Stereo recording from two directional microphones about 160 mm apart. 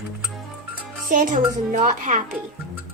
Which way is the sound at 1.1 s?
55° right (ahead or behind).